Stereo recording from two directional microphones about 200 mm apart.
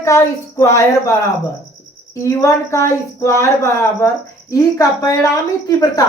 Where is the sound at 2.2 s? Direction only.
15° left (ahead or behind).